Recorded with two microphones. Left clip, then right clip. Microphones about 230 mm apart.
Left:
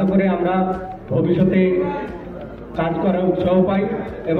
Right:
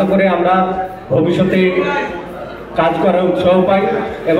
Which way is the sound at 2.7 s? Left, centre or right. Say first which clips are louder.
Right 8 dB; right.